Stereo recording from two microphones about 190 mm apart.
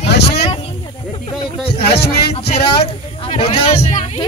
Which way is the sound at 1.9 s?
60° left (ahead or behind).